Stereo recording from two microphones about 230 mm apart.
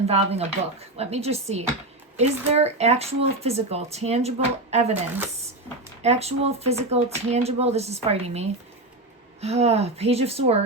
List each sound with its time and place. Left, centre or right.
0.1 s speech: right
6.0 s speech: right